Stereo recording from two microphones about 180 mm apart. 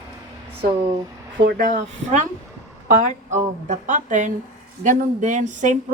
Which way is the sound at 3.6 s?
45° right (ahead or behind).